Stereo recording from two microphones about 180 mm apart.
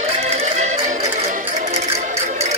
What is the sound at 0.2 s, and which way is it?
Music, 35° right (ahead or behind).